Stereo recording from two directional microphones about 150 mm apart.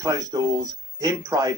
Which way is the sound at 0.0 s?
25° right (ahead or behind).